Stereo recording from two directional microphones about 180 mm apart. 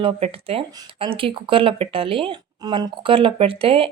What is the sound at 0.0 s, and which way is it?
Speech, 30° right (ahead or behind).